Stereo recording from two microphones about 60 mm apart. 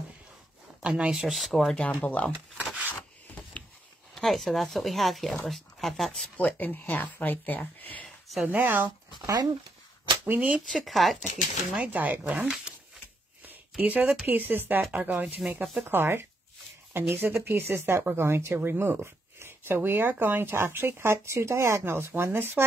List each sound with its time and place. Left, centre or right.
0.8 s speech: right
1.1 s speech: centre
1.8 s speech: left
2.8 s rub: left
4.1 s speech: centre
6.3 s speech: left
8.5 s speech: right
9.2 s speech: right
10.2 s speech: right
10.7 s speech: centre
11.7 s speech: right
13.5 s a sound: right
14.2 s speech: right
15.9 s speech: right